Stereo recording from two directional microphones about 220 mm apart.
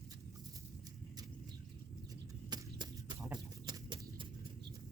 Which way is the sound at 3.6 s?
20° right (ahead or behind).